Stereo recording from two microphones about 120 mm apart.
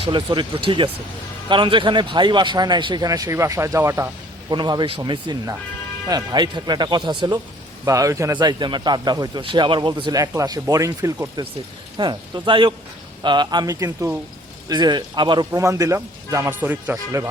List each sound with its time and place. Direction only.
0.0 s speech: 40° right (ahead or behind); by 4.1 s 20° right (ahead or behind)
4.4 s speech: 35° right (ahead or behind)
7.9 s speech: 30° right (ahead or behind)
8.4 s speech: 40° right (ahead or behind)
9.4 s speech: 45° right (ahead or behind); by 11.4 s 25° right (ahead or behind)
11.9 s speech: 40° right (ahead or behind); by 17.2 s 20° right (ahead or behind)